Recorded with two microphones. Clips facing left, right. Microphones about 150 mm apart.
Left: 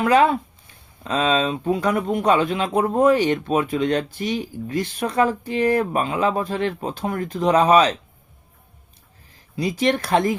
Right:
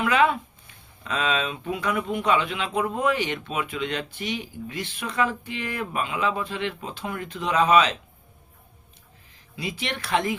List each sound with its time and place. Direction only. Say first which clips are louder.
0.0 s speech: left 5 dB; 35° left (ahead or behind)
9.6 s speech: left 11 dB; 40° left (ahead or behind)